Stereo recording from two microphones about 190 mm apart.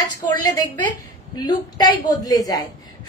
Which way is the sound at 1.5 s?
20° left (ahead or behind).